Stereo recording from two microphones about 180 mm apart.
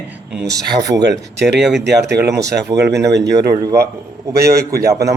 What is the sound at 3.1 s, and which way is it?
Speech, 70° right (ahead or behind).